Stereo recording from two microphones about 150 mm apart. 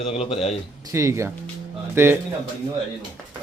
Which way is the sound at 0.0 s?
40° left (ahead or behind).